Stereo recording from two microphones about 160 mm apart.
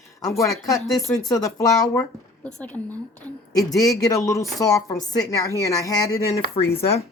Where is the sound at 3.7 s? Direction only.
20° left (ahead or behind).